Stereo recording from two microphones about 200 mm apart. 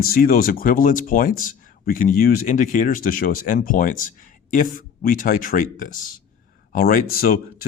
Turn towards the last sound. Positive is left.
turn(degrees=45)  # may be behind; listen again after turning